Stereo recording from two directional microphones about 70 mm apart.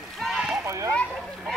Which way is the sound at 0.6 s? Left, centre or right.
Right.